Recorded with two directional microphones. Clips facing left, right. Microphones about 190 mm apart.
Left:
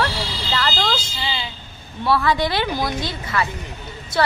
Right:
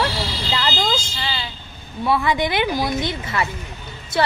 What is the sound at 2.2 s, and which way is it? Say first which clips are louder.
A woman's voice: even; 20° right (ahead or behind).